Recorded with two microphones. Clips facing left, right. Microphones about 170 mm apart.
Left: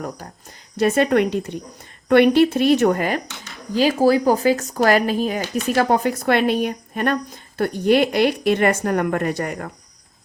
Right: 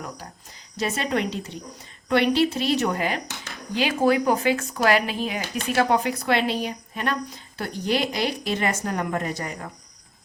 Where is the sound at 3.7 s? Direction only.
40° left (ahead or behind); by 9.7 s 60° left (ahead or behind).